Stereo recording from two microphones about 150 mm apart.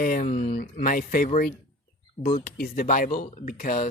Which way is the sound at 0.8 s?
65° left (ahead or behind).